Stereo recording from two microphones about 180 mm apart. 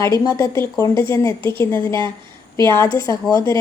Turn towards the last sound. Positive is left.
turn(degrees=20)  # may be behind; listen again after turning